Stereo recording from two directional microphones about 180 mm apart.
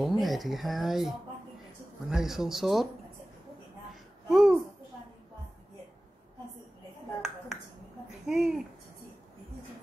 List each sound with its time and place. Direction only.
0.2 s speech: centre (ahead or behind)
3.9 s babbling: centre (ahead or behind)
7.2 s a sound: 5° right (ahead or behind)
8.3 s speech: 5° right (ahead or behind)